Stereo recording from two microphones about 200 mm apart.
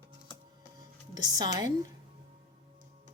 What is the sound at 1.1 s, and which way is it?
Speech, 20° right (ahead or behind).